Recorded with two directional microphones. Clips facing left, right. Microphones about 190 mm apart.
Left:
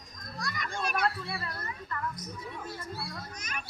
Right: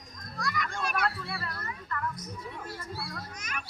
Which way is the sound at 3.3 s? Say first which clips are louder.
Right 1 dB; 40° left (ahead or behind).